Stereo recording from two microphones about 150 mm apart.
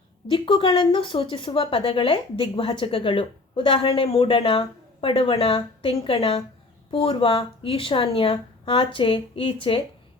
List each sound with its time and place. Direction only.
0.3 s speech: 35° left (ahead or behind)